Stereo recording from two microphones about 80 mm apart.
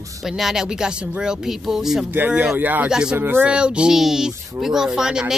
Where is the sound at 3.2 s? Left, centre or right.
Right.